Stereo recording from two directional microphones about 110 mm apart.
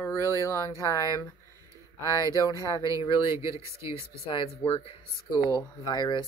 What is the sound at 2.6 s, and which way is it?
Speech, 35° left (ahead or behind).